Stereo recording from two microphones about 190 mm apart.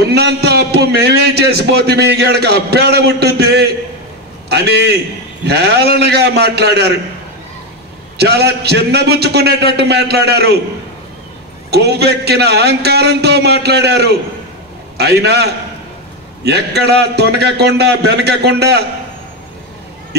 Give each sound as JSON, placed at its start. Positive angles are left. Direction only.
{"t": 0.0, "sound": "a man's voice", "side_deg": -60}
{"t": 8.2, "sound": "a man's voice", "side_deg": -60}
{"t": 11.7, "sound": "a man's voice", "side_deg": -60}